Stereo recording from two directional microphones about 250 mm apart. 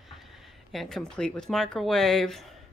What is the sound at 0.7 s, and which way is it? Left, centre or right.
A woman's voice, centre.